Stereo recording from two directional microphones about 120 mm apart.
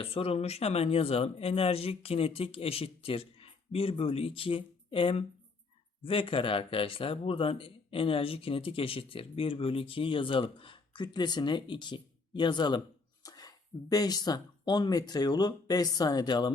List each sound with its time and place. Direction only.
0.0 s speech: 50° left (ahead or behind)
13.2 s a sound: 35° left (ahead or behind)
13.9 s speech: 35° left (ahead or behind)